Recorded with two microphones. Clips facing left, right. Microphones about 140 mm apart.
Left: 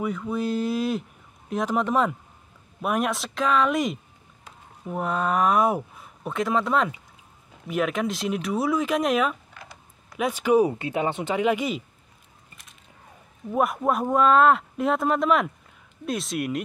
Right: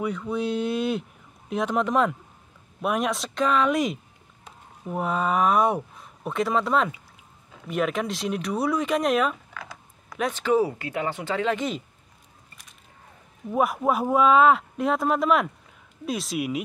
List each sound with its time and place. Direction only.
0.0 s speech: centre (ahead or behind)
13.5 s speech: centre (ahead or behind)